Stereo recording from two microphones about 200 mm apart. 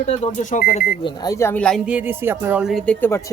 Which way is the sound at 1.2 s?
15° left (ahead or behind).